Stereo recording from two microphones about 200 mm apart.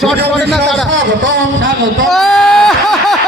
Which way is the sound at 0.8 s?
70° right (ahead or behind).